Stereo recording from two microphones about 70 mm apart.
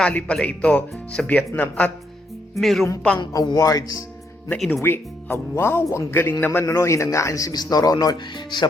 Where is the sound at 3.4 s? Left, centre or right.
Left.